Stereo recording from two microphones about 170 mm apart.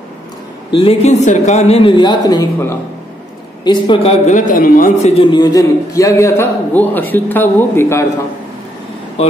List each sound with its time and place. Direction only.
0.7 s a man's voice: 35° left (ahead or behind); by 5.1 s 55° left (ahead or behind)
5.1 s a man's voice: 25° left (ahead or behind)